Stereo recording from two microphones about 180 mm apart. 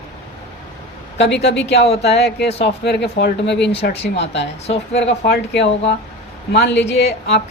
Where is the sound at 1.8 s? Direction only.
35° left (ahead or behind).